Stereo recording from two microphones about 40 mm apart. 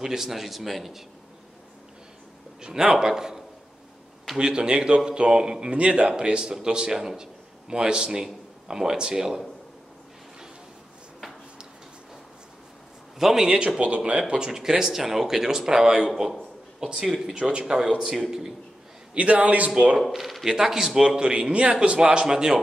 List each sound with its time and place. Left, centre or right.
0.0 s a man's voice: centre
2.6 s a man's voice: right
4.4 s a man's voice: right
13.2 s speech: centre
13.5 s a man's voice: right
14.5 s speech: centre
17.4 s a man's voice: right
17.7 s speech: centre
19.1 s a man's voice: right
19.7 s a man's voice: right
20.0 s speech: centre
20.4 s speech: centre
21.2 s a man's voice: right